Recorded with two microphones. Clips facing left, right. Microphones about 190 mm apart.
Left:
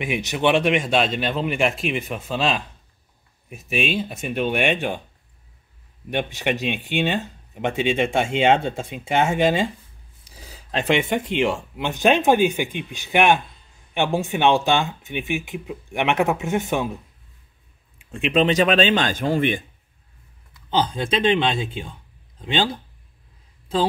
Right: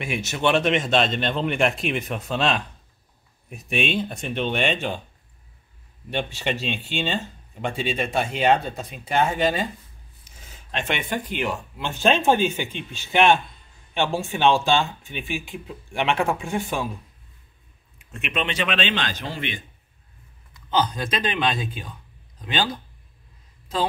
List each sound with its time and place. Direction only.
0.0 s speech: 15° left (ahead or behind)
6.0 s speech: 15° left (ahead or behind)
18.1 s speech: 30° left (ahead or behind); by 19.6 s 50° left (ahead or behind)
20.7 s speech: 30° left (ahead or behind)